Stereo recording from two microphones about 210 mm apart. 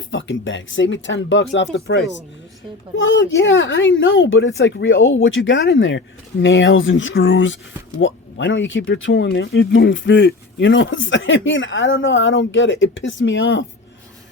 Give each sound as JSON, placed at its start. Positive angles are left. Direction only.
{"t": 0.1, "sound": "speech", "side_deg": 65}
{"t": 3.0, "sound": "speech", "side_deg": 65}